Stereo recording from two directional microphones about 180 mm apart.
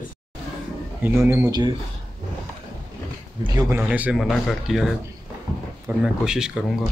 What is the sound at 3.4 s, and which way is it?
Speech, 15° right (ahead or behind).